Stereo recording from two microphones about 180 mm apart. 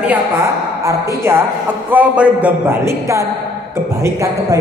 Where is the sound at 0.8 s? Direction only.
15° right (ahead or behind).